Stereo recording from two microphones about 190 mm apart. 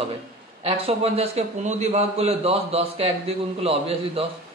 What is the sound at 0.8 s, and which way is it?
A man's voice, 30° right (ahead or behind).